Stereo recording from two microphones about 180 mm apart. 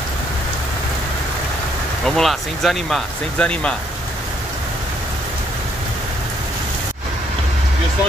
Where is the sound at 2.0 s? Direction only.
Centre (ahead or behind).